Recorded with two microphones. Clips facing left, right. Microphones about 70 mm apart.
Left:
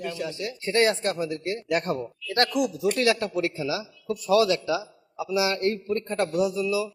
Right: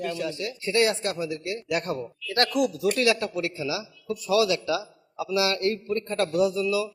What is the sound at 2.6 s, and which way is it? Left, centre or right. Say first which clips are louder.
Speech: right 1 dB; centre.